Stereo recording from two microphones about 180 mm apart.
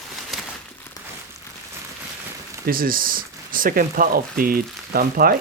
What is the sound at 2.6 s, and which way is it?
Speech, 55° right (ahead or behind).